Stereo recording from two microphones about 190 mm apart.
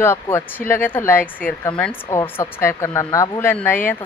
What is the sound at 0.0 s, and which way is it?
Speech, 15° left (ahead or behind).